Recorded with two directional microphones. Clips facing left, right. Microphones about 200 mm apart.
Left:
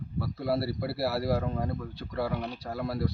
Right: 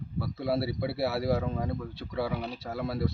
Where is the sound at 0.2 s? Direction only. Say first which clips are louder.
Even; centre (ahead or behind).